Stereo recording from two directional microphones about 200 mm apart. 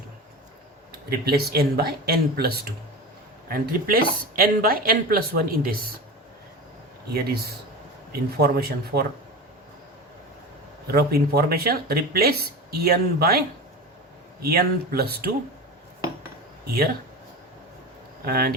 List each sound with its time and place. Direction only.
1.2 s speech: 50° right (ahead or behind)
7.1 s speech: 50° right (ahead or behind)
10.9 s speech: 50° right (ahead or behind)
14.4 s speech: 50° right (ahead or behind)
18.3 s speech: 50° right (ahead or behind)